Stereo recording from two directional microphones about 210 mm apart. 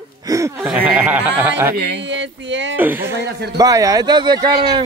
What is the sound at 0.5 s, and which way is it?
Speech, 5° right (ahead or behind).